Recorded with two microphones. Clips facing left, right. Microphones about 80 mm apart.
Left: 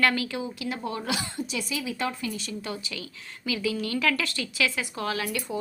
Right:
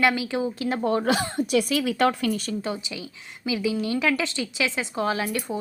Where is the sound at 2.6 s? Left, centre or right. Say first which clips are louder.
Right 4 dB; right.